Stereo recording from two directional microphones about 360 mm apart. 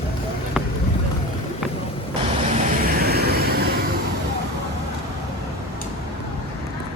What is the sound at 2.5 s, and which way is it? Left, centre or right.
Vehicle, right.